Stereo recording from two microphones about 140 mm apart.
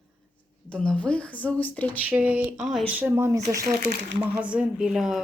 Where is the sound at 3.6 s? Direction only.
90° right.